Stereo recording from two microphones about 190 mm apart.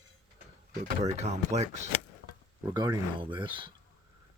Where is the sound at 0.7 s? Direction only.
35° right (ahead or behind).